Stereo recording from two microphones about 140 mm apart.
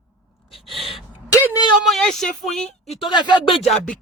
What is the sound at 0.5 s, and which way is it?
Gasp, centre (ahead or behind).